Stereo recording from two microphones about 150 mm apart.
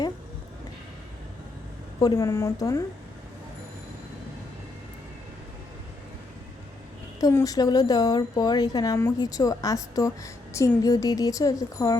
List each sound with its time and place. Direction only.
2.0 s a woman's voice: 25° left (ahead or behind)
7.2 s a woman's voice: 25° left (ahead or behind)